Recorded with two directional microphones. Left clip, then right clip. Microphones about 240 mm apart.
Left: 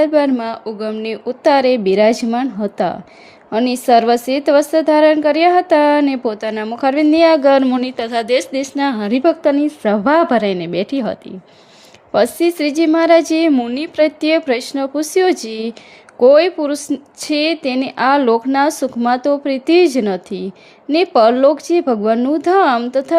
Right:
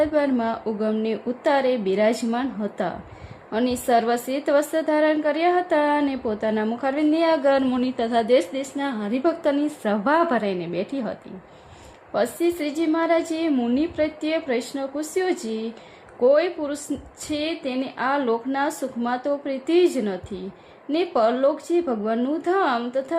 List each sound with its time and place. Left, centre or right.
0.0 s a woman's voice: left